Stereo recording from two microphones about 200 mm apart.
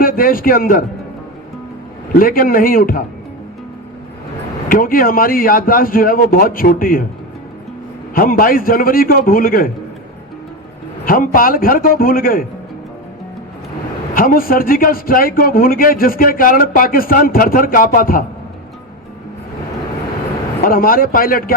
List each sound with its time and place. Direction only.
0.0 s a man's voice: 45° left (ahead or behind)
2.1 s a man's voice: 45° left (ahead or behind)
4.7 s a man's voice: 45° left (ahead or behind)
8.1 s a man's voice: 45° left (ahead or behind)
11.0 s a man's voice: 45° left (ahead or behind)
14.1 s a man's voice: 45° left (ahead or behind)
20.6 s a man's voice: 45° left (ahead or behind)